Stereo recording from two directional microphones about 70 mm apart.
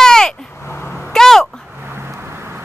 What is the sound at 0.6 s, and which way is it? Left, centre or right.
Cat, left.